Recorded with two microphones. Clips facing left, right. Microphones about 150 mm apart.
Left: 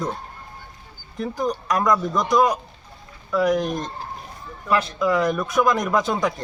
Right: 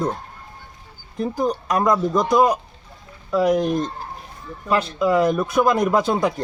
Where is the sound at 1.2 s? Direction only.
30° right (ahead or behind).